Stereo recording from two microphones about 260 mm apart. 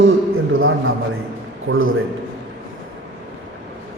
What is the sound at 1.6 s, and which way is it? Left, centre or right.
Speech, right.